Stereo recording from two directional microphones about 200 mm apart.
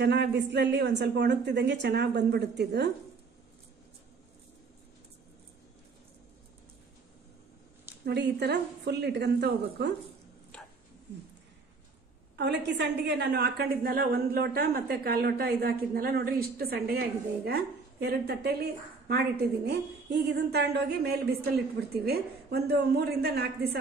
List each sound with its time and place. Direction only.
0.0 s a woman's voice: 55° right (ahead or behind)
8.0 s a woman's voice: 55° right (ahead or behind)
12.4 s a woman's voice: 60° right (ahead or behind)